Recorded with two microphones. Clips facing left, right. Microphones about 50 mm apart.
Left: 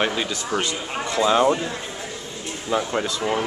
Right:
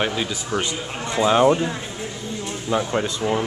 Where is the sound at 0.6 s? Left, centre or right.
Centre.